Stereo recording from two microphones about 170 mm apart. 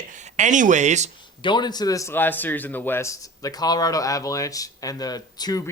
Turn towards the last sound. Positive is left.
turn(degrees=25)  # may be behind; listen again after turning